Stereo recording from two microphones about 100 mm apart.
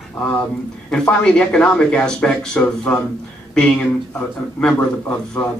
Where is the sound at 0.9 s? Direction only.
10° left (ahead or behind).